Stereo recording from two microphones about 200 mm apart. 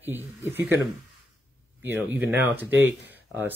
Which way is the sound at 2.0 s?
10° right (ahead or behind).